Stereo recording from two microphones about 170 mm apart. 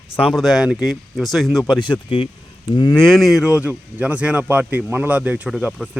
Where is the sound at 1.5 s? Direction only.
25° left (ahead or behind).